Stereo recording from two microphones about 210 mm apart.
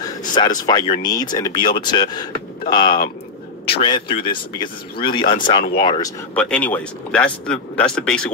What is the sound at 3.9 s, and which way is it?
Speech, 25° left (ahead or behind).